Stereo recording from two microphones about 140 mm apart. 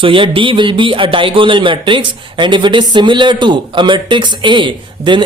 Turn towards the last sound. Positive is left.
turn(degrees=-35)  # may be behind; listen again after turning